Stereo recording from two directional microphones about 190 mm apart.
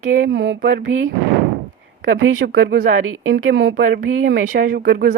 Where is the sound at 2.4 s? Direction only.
55° right (ahead or behind).